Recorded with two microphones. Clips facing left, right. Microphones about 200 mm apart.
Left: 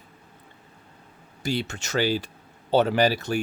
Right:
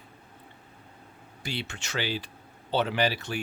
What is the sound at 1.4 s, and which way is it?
Speech, 45° left (ahead or behind).